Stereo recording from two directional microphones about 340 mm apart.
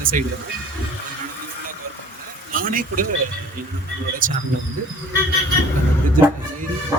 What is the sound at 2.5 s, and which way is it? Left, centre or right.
Speech, right.